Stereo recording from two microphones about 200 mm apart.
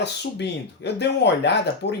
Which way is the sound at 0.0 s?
60° left (ahead or behind).